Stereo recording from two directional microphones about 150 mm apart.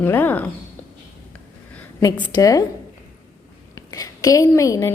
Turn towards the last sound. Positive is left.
turn(degrees=20)  # may be behind; listen again after turning